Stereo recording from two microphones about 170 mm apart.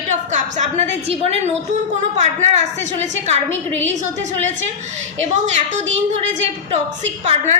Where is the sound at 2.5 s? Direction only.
45° right (ahead or behind).